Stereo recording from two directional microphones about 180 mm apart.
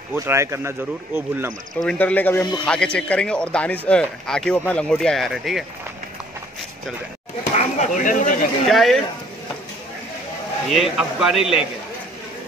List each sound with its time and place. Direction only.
0.1 s speech: 15° right (ahead or behind)
1.8 s a man's voice: 5° left (ahead or behind)
7.5 s a sound: 45° left (ahead or behind)
8.6 s a man's voice: centre (ahead or behind)
10.7 s a man's voice: 5° right (ahead or behind)